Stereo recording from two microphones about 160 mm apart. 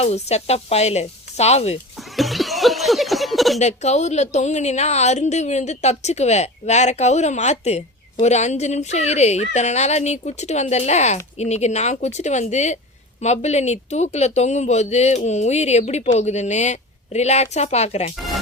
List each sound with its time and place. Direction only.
0.0 s speech: 40° left (ahead or behind)
2.1 s a sound: centre (ahead or behind)
3.6 s speech: 45° left (ahead or behind)